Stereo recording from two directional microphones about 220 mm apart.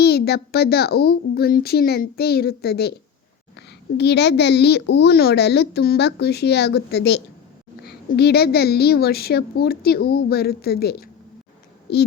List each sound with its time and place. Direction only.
0.0 s a child's voice: 45° left (ahead or behind)
3.9 s a child's voice: 50° left (ahead or behind)